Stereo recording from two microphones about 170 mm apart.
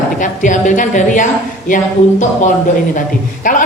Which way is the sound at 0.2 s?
50° left (ahead or behind).